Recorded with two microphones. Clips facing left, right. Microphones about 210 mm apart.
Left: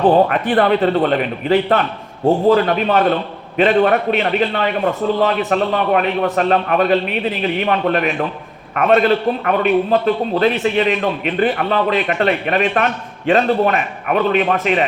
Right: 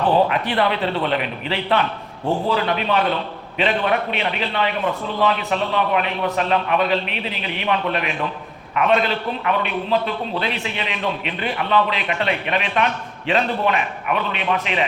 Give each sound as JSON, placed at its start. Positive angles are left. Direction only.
{"t": 0.3, "sound": "a man's voice", "side_deg": 50}